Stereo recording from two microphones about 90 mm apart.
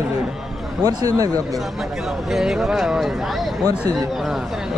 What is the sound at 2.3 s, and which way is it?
Speech, centre (ahead or behind).